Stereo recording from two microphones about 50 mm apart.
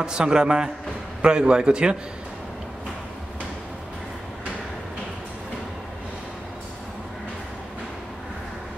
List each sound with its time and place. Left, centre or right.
0.0 s a man's voice: centre